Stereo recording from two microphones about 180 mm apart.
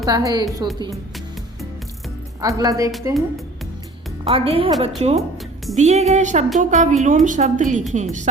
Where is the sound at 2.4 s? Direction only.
20° right (ahead or behind).